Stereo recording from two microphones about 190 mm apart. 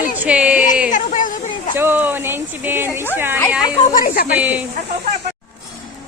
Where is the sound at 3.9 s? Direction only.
50° left (ahead or behind).